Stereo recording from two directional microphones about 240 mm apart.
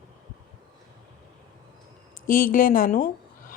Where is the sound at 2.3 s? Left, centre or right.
Left.